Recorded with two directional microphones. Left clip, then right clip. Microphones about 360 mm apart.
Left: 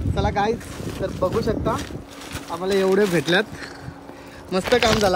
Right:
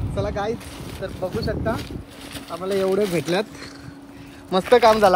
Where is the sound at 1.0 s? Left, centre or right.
Centre.